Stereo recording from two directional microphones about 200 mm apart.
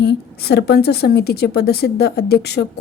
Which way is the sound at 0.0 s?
50° left (ahead or behind).